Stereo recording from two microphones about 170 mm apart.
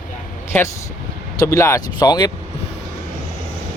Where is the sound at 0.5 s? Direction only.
10° left (ahead or behind).